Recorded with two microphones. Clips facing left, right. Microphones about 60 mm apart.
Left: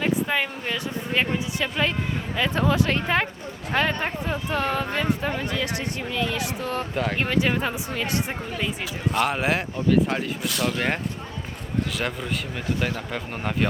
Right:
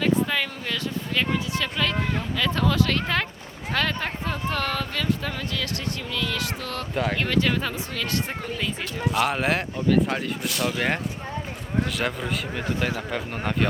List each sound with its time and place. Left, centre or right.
0.0 s speech: left
6.9 s speech: centre
7.2 s speech: left
9.1 s speech: centre